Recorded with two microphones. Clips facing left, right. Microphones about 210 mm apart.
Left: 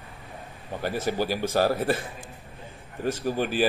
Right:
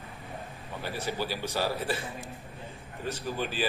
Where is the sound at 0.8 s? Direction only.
45° left (ahead or behind).